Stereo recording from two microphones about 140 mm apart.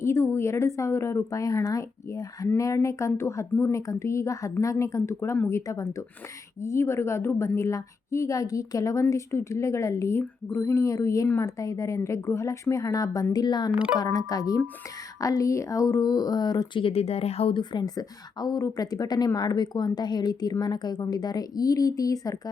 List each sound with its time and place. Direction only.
0.0 s speech: 20° left (ahead or behind)
13.7 s speech: 10° right (ahead or behind)
14.0 s speech: 25° left (ahead or behind)